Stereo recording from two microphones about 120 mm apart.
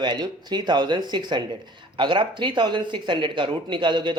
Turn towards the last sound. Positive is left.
turn(degrees=-40)  # may be behind; listen again after turning